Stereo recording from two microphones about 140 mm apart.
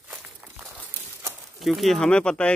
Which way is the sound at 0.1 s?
10° right (ahead or behind).